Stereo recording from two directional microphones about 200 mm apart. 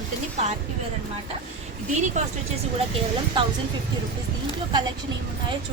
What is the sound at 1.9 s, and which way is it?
Speech, 35° right (ahead or behind).